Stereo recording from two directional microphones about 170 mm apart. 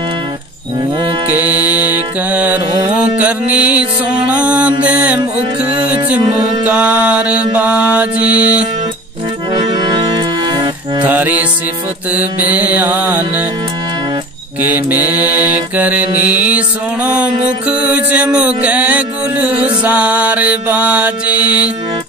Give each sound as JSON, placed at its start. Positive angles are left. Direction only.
{"t": 1.3, "sound": "music", "side_deg": -10}
{"t": 4.3, "sound": "mantra", "side_deg": -5}
{"t": 4.8, "sound": "music", "side_deg": -10}
{"t": 10.4, "sound": "music", "side_deg": -25}
{"t": 11.1, "sound": "music", "side_deg": -10}
{"t": 12.1, "sound": "mantra", "side_deg": -10}
{"t": 14.6, "sound": "mantra", "side_deg": -10}
{"t": 16.3, "sound": "music", "side_deg": -10}